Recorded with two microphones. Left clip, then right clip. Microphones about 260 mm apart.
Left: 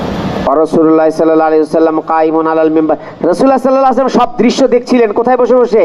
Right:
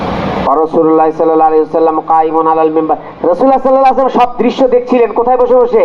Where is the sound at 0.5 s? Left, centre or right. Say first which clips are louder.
Left 1 dB; left.